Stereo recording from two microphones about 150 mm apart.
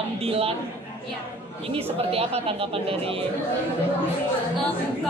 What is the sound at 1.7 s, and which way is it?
Speech, 40° right (ahead or behind).